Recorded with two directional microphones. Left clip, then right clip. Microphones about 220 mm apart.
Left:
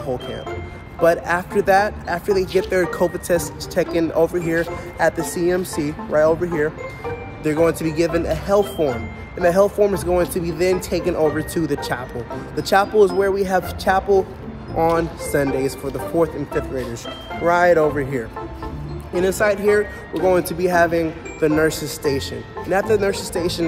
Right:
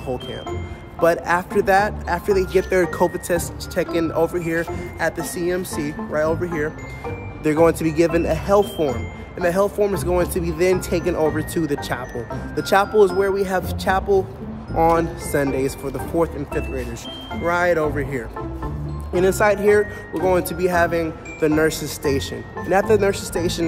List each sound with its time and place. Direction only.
1.0 s speech: 5° right (ahead or behind)
3.3 s speech: centre (ahead or behind)
7.4 s speech: 10° right (ahead or behind)
19.1 s speech: 10° right (ahead or behind)